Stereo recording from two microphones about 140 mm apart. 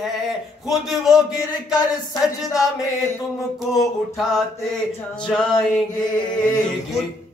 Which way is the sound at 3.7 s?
Centre (ahead or behind).